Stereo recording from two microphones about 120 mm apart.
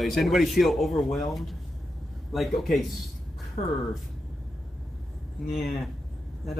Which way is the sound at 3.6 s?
60° left (ahead or behind).